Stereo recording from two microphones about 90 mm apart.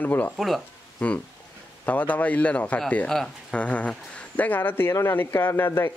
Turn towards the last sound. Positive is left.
turn(degrees=25)  # may be behind; listen again after turning